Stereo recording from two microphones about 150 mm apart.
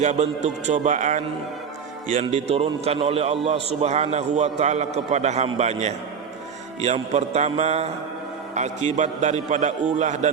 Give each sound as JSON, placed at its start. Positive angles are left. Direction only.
{"t": 0.0, "sound": "a man's voice", "side_deg": -50}
{"t": 2.3, "sound": "a man's voice", "side_deg": -45}